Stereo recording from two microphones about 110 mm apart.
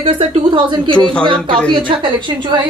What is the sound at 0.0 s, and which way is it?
A woman's voice, 55° right (ahead or behind).